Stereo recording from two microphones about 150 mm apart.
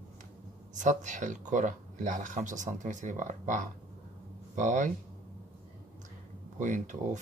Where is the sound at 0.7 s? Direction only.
55° right (ahead or behind).